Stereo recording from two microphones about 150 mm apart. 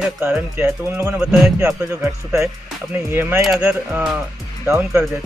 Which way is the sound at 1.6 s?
20° right (ahead or behind).